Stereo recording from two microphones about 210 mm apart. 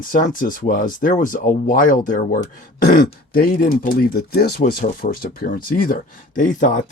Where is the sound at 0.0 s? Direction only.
40° left (ahead or behind).